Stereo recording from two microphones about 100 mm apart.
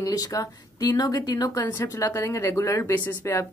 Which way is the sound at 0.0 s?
35° left (ahead or behind).